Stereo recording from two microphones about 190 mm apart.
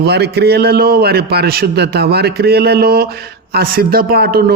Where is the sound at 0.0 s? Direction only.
60° right (ahead or behind).